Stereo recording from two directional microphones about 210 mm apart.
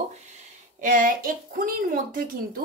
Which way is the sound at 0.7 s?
40° right (ahead or behind).